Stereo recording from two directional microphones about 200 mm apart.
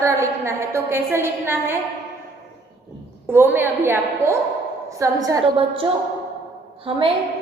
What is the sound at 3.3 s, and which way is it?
A woman's voice, 10° right (ahead or behind).